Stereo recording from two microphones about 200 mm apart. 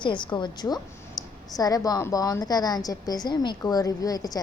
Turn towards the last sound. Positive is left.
turn(degrees=20)  # may be behind; listen again after turning